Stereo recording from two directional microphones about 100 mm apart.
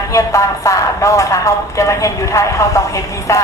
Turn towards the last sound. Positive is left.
turn(degrees=35)  # may be behind; listen again after turning